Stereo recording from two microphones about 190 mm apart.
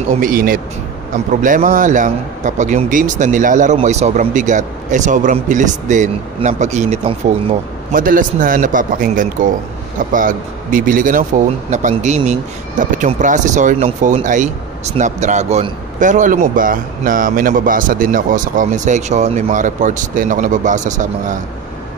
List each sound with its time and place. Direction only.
0.2 s a man's voice: 50° right (ahead or behind)
7.9 s a man's voice: 45° right (ahead or behind)